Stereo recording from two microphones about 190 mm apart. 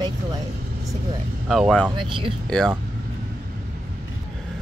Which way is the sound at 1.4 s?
Centre (ahead or behind).